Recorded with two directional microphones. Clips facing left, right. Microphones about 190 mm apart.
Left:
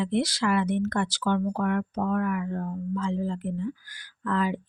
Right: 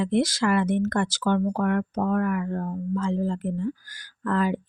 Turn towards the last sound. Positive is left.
turn(degrees=-45)  # may be behind; listen again after turning